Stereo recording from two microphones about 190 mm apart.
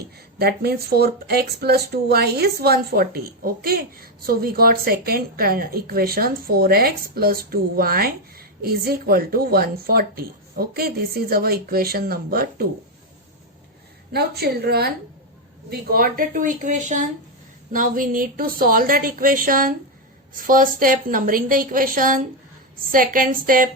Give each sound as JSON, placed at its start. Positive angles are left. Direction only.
{"t": 0.3, "sound": "speech", "side_deg": -55}
{"t": 14.1, "sound": "a woman's voice", "side_deg": -55}